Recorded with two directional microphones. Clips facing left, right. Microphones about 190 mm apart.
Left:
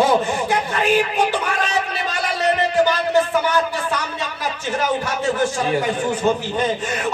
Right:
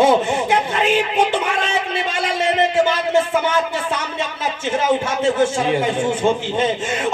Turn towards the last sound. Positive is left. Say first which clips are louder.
# right 1 dB
turn(degrees=-25)  # may be behind; listen again after turning